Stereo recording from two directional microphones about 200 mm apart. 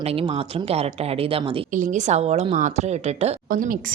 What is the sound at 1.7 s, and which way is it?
A woman's voice, 40° right (ahead or behind).